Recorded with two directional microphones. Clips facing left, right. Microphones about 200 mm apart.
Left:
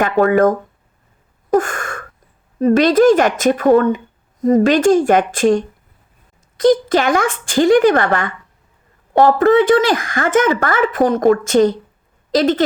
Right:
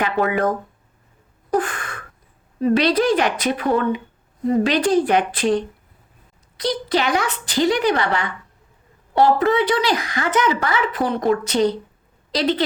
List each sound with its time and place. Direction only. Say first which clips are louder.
0.0 s speech: left 7 dB; 45° left (ahead or behind)
1.5 s a sound: left 5 dB; 45° left (ahead or behind)
2.6 s speech: left 6 dB; 45° left (ahead or behind)